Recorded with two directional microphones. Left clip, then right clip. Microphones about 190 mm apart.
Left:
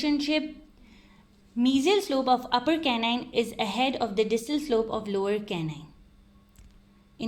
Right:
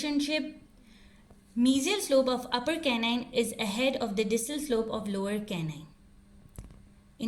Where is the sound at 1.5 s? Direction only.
40° left (ahead or behind).